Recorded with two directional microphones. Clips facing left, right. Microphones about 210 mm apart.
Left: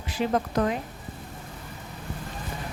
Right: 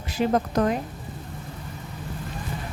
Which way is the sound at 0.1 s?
40° right (ahead or behind).